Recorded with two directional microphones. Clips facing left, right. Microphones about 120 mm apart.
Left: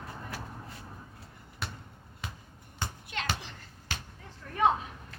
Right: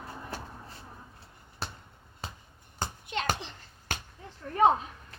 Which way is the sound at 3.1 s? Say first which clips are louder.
Right 5 dB; 20° right (ahead or behind).